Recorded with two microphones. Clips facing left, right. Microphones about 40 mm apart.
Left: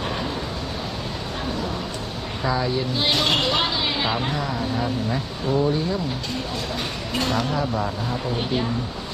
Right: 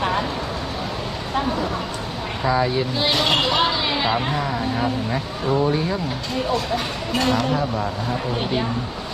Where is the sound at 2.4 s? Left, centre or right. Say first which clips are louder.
Right 4 dB; centre.